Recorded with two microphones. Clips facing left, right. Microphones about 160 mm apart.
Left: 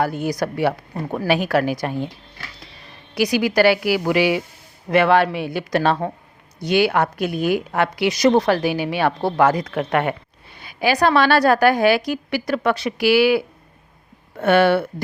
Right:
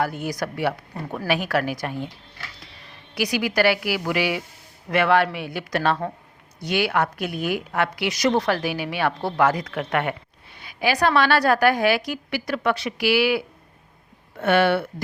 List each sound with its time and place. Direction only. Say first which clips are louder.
0.0 s a woman's voice: left 4 dB; 30° left (ahead or behind)
3.2 s a woman's voice: left 5 dB; 30° left (ahead or behind)